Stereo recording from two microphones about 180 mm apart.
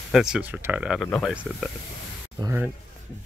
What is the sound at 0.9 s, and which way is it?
Speech, 5° left (ahead or behind).